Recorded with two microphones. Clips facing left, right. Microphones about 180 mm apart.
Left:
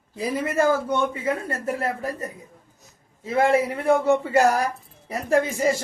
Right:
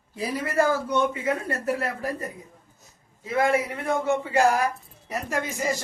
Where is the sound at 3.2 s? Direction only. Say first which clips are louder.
Left 3 dB; 30° left (ahead or behind).